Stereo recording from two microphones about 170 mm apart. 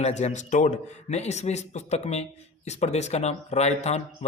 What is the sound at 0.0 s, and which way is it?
A man's voice, 40° left (ahead or behind).